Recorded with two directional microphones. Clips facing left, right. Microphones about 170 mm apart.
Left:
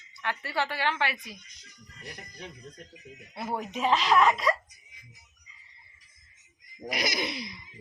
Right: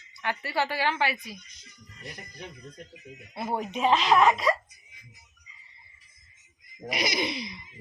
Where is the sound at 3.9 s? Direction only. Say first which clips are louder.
Right 2 dB; 25° right (ahead or behind).